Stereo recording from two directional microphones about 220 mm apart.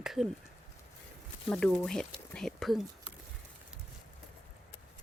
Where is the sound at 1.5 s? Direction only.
5° left (ahead or behind).